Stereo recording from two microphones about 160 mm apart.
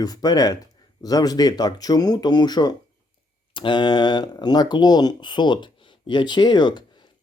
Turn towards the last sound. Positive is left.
turn(degrees=30)  # may be behind; listen again after turning